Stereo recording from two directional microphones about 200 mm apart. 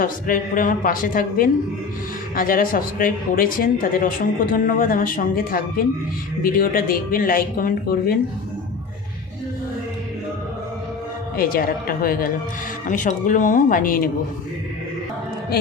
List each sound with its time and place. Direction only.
0.0 s speech: 45° left (ahead or behind)
11.3 s speech: 45° left (ahead or behind)